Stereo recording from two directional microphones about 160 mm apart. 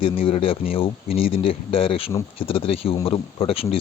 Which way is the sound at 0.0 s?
35° left (ahead or behind).